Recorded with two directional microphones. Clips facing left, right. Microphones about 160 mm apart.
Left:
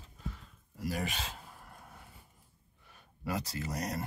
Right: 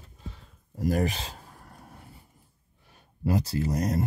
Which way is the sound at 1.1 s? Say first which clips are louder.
Right 2 dB; 35° right (ahead or behind).